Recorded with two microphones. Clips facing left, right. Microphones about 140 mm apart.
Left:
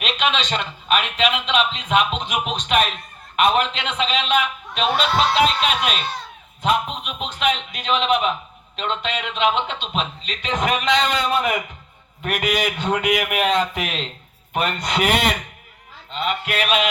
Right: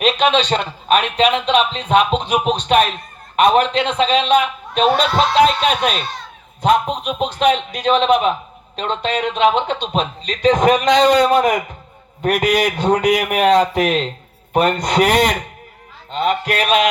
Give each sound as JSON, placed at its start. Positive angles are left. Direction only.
{"t": 0.0, "sound": "a man's voice", "side_deg": -35}